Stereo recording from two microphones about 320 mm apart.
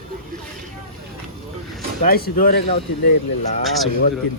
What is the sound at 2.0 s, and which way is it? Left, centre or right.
Speech, left.